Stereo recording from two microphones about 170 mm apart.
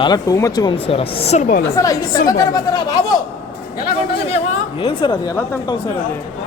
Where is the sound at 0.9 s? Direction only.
35° left (ahead or behind).